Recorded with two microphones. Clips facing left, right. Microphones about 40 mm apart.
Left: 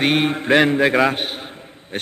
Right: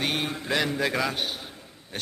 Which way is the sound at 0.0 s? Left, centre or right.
Left.